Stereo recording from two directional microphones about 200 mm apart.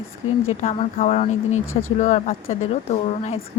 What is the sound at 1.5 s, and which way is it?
Speech, 90° left.